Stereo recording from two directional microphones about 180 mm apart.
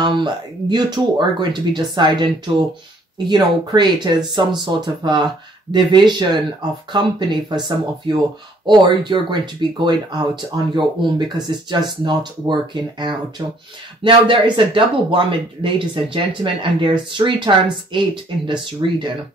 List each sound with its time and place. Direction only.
0.0 s speech: 25° right (ahead or behind)
8.6 s speech: 25° right (ahead or behind)